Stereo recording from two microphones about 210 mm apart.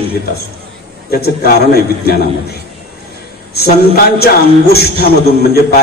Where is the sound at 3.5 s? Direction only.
50° left (ahead or behind).